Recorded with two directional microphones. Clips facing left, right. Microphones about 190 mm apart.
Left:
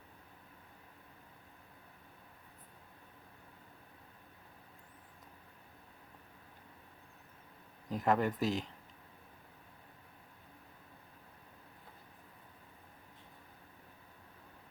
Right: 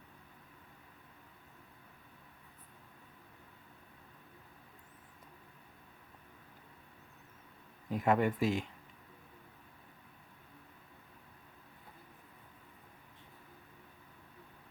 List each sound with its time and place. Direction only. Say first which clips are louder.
7.9 s speech: right 1 dB; 5° right (ahead or behind)
8.4 s speech: right 2 dB; 40° left (ahead or behind)